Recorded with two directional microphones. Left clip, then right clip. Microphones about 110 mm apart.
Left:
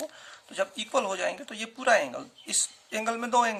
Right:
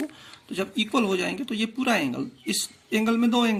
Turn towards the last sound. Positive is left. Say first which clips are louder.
# right 1 dB
turn(degrees=-15)  # may be behind; listen again after turning